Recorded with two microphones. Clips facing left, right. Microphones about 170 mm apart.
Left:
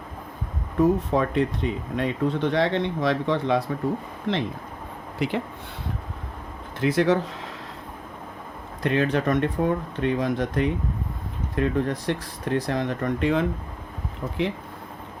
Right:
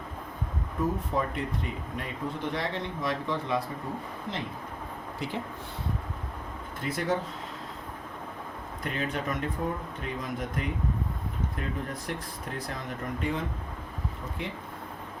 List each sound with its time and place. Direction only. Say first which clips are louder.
0.8 s speech: left 9 dB; 80° left
4.3 s speech: left 11 dB; 90° left
6.7 s speech: left 9 dB; 85° left
8.8 s speech: left 10 dB; 80° left